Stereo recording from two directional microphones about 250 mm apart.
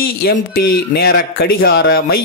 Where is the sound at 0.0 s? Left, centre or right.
Left.